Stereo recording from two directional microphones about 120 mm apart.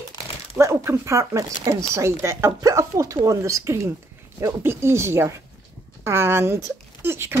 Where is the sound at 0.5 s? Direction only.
20° right (ahead or behind).